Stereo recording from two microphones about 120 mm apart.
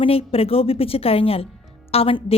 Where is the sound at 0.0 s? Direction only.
55° left (ahead or behind).